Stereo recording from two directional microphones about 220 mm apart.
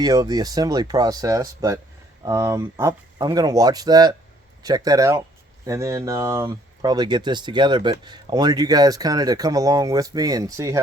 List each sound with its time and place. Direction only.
0.0 s speech: 15° right (ahead or behind)